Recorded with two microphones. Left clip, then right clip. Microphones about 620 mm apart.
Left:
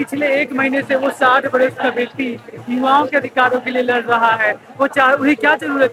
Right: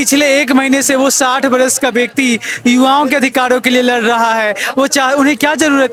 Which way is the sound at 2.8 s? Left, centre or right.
Right.